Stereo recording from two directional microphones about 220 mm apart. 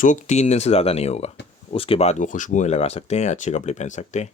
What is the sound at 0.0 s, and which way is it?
Speech, 35° left (ahead or behind).